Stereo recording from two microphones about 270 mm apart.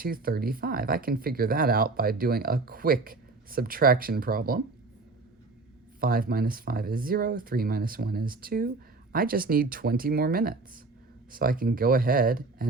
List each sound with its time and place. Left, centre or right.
0.0 s speech: right
6.0 s speech: right